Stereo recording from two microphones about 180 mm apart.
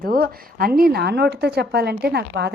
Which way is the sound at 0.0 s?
55° right (ahead or behind).